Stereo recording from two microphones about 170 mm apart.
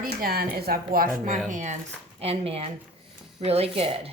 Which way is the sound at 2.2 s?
35° right (ahead or behind).